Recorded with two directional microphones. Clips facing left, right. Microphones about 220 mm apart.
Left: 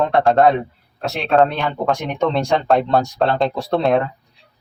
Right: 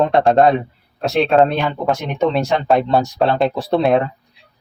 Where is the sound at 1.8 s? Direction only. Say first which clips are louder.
Even; 5° right (ahead or behind).